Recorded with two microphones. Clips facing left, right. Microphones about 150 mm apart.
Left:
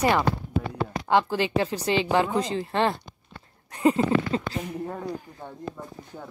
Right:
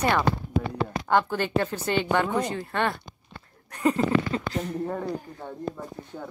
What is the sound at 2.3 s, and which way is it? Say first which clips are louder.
Speech: left 2 dB; 25° left (ahead or behind).